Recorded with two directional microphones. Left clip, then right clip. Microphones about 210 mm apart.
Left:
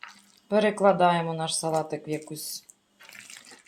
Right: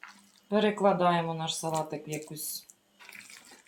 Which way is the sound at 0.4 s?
40° left (ahead or behind).